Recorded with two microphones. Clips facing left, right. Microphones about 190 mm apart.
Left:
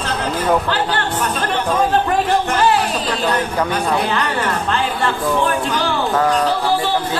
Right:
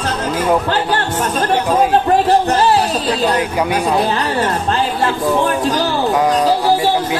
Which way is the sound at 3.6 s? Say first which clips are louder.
Right 2 dB; 15° right (ahead or behind).